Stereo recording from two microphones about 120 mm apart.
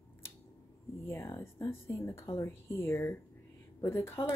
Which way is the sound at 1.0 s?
25° left (ahead or behind).